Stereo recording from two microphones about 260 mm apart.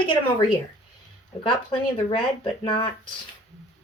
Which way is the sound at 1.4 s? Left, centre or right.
Left.